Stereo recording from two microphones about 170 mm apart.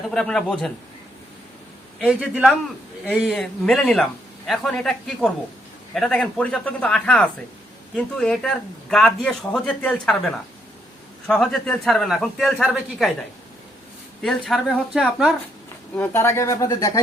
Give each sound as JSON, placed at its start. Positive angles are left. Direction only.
{"t": 0.1, "sound": "speech", "side_deg": 5}
{"t": 2.0, "sound": "speech", "side_deg": -5}
{"t": 14.2, "sound": "speech", "side_deg": 0}
{"t": 16.0, "sound": "speech", "side_deg": 15}